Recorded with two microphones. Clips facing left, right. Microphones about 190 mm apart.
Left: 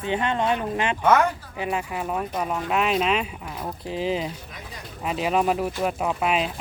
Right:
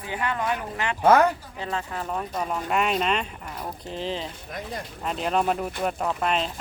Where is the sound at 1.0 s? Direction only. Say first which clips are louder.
Right 2 dB; 35° right (ahead or behind).